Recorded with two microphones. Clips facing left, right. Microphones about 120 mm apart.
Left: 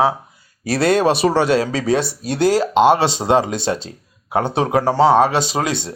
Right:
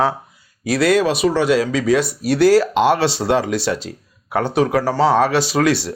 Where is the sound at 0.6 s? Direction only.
30° left (ahead or behind).